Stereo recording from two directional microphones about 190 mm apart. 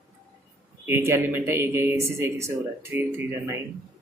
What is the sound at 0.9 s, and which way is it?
Speech, 15° right (ahead or behind).